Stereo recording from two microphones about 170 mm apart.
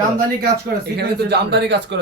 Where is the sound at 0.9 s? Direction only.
75° right (ahead or behind).